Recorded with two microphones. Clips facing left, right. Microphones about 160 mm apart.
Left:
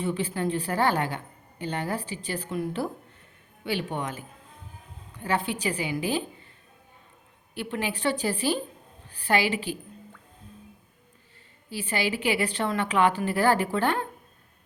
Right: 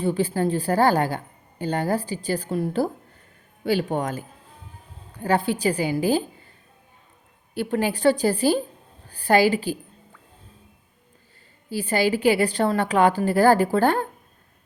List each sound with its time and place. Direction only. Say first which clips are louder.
0.0 s a woman's voice: right 5 dB; 35° right (ahead or behind)
7.5 s a woman's voice: right 7 dB; 40° right (ahead or behind)
11.7 s a woman's voice: right 7 dB; 40° right (ahead or behind)